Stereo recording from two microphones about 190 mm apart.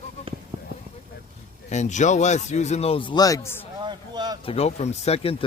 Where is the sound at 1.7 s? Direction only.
40° left (ahead or behind); by 3.6 s 15° left (ahead or behind).